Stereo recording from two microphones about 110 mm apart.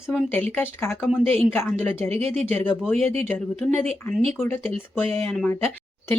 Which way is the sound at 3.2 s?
20° left (ahead or behind).